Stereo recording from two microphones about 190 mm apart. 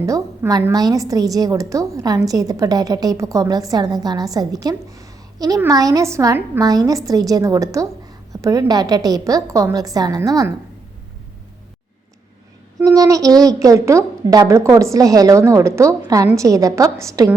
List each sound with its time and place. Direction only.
0.0 s a woman's voice: 15° right (ahead or behind)
12.8 s a woman's voice: 20° right (ahead or behind)